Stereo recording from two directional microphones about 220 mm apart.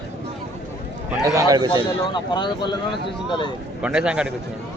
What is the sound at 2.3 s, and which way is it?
Speech, 20° left (ahead or behind).